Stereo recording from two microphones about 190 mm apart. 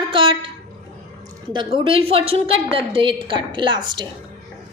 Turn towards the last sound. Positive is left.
turn(degrees=-25)  # may be behind; listen again after turning